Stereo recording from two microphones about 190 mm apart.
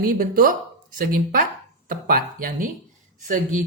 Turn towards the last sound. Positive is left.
turn(degrees=-45)  # may be behind; listen again after turning